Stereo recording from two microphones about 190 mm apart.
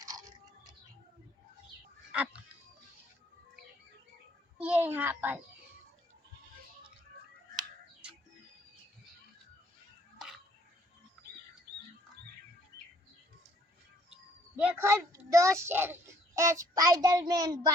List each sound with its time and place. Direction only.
2.1 s fowl: 5° right (ahead or behind)
4.5 s a child's voice: 5° right (ahead or behind)
14.5 s a child's voice: 10° right (ahead or behind)